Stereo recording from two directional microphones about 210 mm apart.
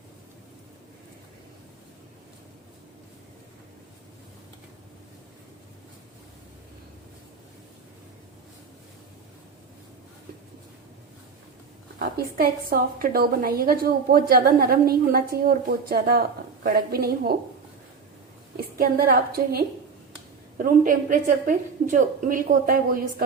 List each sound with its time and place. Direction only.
11.9 s a woman's voice: 45° right (ahead or behind)
18.5 s a woman's voice: 45° right (ahead or behind)